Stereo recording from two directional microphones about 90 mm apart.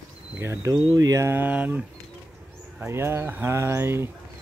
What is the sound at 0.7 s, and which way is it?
Speech, 50° right (ahead or behind).